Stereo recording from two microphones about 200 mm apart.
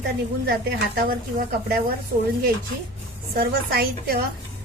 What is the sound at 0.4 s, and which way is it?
Speech, 50° right (ahead or behind).